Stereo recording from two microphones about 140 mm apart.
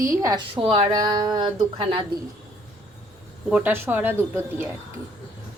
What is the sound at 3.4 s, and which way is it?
A woman's voice, 5° right (ahead or behind).